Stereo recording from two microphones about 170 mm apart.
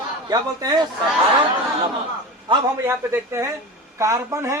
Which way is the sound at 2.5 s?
30° right (ahead or behind).